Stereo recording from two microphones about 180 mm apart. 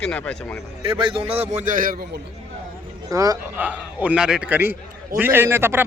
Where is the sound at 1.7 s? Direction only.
50° right (ahead or behind).